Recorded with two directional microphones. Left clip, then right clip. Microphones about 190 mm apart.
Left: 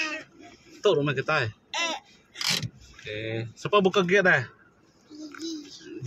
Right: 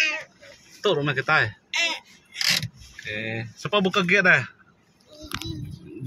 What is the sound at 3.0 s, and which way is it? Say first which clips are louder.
Speech: right 3 dB; 5° left (ahead or behind).